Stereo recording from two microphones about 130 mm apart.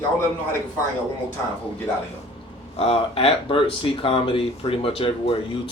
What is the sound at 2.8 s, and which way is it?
Speech, 50° left (ahead or behind).